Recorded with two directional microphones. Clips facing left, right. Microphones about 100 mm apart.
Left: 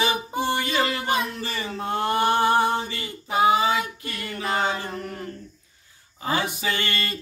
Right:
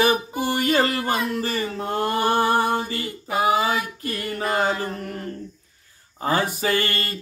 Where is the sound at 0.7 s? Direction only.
40° right (ahead or behind).